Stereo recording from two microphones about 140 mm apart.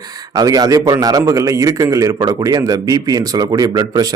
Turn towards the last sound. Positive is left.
turn(degrees=-25)  # may be behind; listen again after turning